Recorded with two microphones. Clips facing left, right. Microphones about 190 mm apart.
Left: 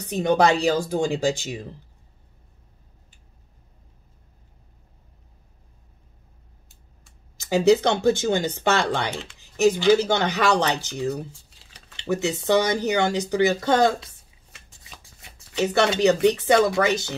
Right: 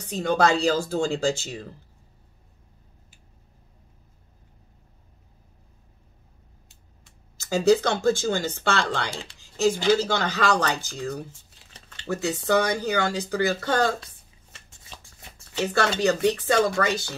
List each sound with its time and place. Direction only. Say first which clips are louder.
0.1 s speech: left 2 dB; 20° left (ahead or behind)
7.3 s speech: left 2 dB; 20° left (ahead or behind)
9.4 s dishes: left 3 dB; 20° left (ahead or behind)
9.9 s speech: left 3 dB; 20° left (ahead or behind)
12.0 s speech: left 3 dB; 20° left (ahead or behind)
15.5 s speech: left 3 dB; 20° left (ahead or behind)